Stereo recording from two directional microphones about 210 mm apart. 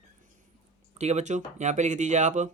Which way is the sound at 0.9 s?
35° right (ahead or behind).